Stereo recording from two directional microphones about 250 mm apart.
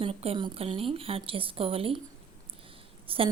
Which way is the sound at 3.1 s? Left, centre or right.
Right.